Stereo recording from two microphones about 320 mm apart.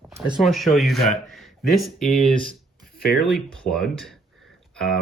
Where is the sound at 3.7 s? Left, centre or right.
Centre.